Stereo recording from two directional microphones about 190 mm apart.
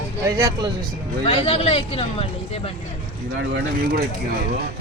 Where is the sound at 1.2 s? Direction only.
30° left (ahead or behind).